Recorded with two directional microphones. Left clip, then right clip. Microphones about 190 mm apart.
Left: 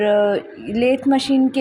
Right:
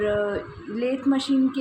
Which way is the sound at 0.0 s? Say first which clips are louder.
Left 8 dB; 35° left (ahead or behind).